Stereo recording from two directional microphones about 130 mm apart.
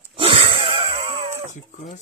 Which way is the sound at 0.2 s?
45° right (ahead or behind).